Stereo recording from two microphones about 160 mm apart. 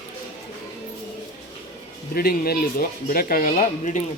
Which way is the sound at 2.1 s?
70° left (ahead or behind).